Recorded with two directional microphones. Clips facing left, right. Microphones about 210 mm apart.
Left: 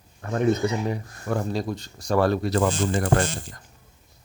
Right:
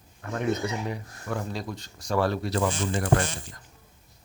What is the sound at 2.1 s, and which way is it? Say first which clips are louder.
Speech: left 4 dB; 50° left (ahead or behind).